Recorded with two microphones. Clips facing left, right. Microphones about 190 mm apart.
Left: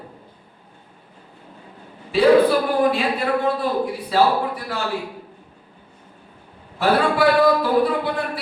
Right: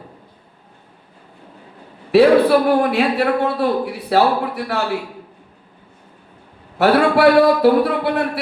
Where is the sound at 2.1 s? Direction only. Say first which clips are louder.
Right 3 dB; 65° right (ahead or behind).